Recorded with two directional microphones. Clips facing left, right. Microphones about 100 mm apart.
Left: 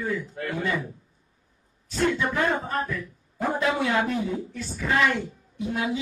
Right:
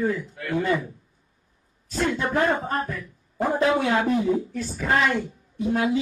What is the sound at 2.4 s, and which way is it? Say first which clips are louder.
A woman's voice: right 2 dB; 40° right (ahead or behind).